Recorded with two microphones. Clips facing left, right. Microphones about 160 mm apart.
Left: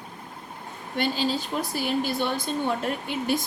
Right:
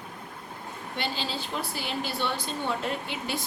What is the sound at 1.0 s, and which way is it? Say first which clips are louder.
A woman's voice: left 7 dB; 45° left (ahead or behind).